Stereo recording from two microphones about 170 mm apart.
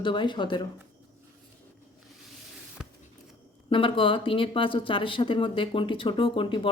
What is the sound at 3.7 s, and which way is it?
Speech, 30° left (ahead or behind).